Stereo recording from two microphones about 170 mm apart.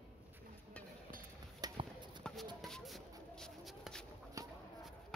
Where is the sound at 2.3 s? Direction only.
5° left (ahead or behind).